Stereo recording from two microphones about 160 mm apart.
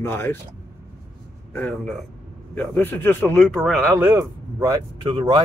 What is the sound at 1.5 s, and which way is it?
Speech, 10° left (ahead or behind).